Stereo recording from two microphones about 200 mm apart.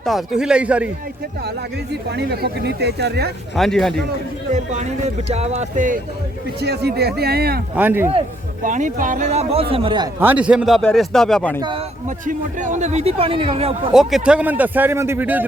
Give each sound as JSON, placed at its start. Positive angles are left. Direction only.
{"t": 0.0, "sound": "a man's voice", "side_deg": 0}
{"t": 1.5, "sound": "speech", "side_deg": -55}
{"t": 3.5, "sound": "a man's voice", "side_deg": 0}
{"t": 4.5, "sound": "a man's voice", "side_deg": -35}
{"t": 6.6, "sound": "speech", "side_deg": -55}
{"t": 7.8, "sound": "a man's voice", "side_deg": -10}
{"t": 8.6, "sound": "a man's voice", "side_deg": -40}
{"t": 10.2, "sound": "a man's voice", "side_deg": -10}
{"t": 12.0, "sound": "a man's voice", "side_deg": -40}
{"t": 13.9, "sound": "a man's voice", "side_deg": 0}